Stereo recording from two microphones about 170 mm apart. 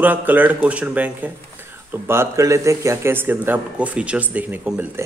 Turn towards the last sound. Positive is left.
turn(degrees=-10)  # may be behind; listen again after turning